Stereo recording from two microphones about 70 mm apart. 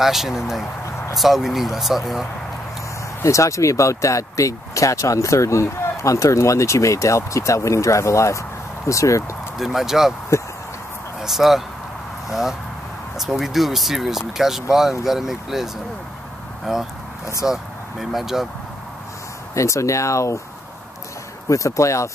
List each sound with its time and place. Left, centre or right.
0.0 s speech: centre
3.2 s speech: left
9.6 s speech: centre
11.1 s speech: centre
19.5 s speech: left
21.5 s speech: left